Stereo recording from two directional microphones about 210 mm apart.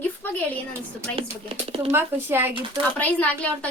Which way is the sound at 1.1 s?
25° right (ahead or behind).